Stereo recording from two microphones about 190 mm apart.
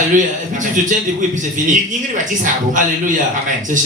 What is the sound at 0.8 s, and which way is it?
Speech, 45° right (ahead or behind).